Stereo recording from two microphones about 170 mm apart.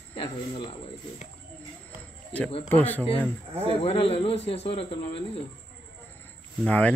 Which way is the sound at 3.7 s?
35° left (ahead or behind).